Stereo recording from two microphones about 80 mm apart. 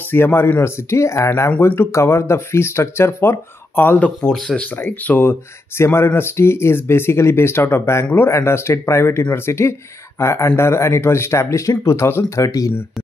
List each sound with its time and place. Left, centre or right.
0.1 s speech: left
4.3 s speech: centre
4.7 s speech: left
12.4 s speech: left